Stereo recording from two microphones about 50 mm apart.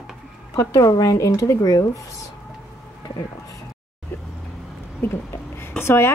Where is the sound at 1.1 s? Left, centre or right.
Left.